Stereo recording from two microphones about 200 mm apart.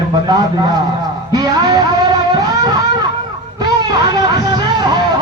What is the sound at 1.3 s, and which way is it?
Music, 20° right (ahead or behind).